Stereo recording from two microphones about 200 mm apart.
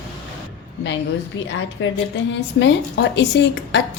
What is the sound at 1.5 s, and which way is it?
A woman's voice, 65° left (ahead or behind).